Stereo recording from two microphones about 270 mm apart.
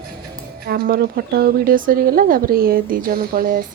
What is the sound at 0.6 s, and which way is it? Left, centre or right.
Speech, right.